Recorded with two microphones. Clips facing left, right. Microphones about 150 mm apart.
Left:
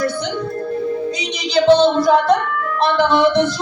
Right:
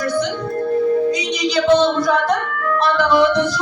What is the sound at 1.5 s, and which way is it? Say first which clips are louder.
Singing: left 3 dB; 30° left (ahead or behind).